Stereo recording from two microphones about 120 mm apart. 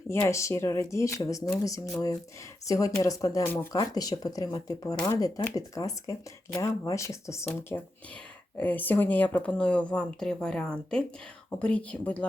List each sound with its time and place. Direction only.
0.1 s speech: 20° left (ahead or behind)